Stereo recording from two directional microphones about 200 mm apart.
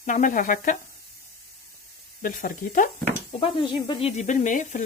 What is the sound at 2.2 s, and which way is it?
Speech, 45° left (ahead or behind).